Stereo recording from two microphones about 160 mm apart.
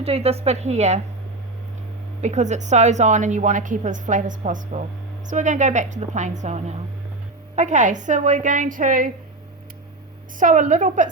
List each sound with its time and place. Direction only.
0.0 s a woman's voice: 40° right (ahead or behind)
2.2 s a woman's voice: 50° right (ahead or behind)
10.4 s a woman's voice: 50° right (ahead or behind)